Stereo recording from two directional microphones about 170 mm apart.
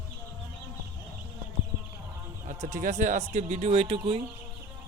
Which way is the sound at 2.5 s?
50° right (ahead or behind).